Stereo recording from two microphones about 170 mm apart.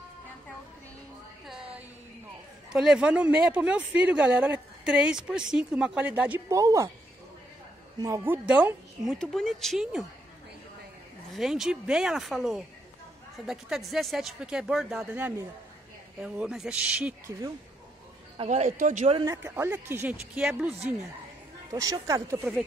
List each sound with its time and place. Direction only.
2.7 s speech: 5° right (ahead or behind)
8.0 s speech: 15° right (ahead or behind)
8.5 s speech: 5° right (ahead or behind)
11.3 s speech: centre (ahead or behind)
18.4 s speech: 40° right (ahead or behind)
19.2 s speech: 15° right (ahead or behind)
21.7 s speech: 20° right (ahead or behind)